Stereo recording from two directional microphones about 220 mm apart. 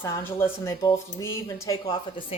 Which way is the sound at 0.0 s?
10° left (ahead or behind).